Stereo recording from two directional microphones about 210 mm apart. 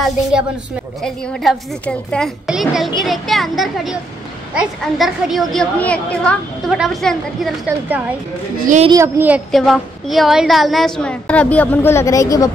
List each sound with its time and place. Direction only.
1.0 s a woman's voice: centre (ahead or behind)
8.5 s a woman's voice: 40° right (ahead or behind)
8.8 s a woman's voice: 15° right (ahead or behind); by 12.4 s 15° left (ahead or behind)